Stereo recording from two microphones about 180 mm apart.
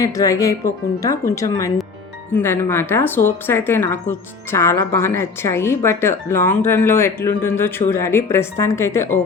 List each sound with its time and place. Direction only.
0.0 s speech: 20° left (ahead or behind)